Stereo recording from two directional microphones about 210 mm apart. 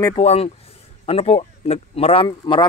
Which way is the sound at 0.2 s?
30° left (ahead or behind).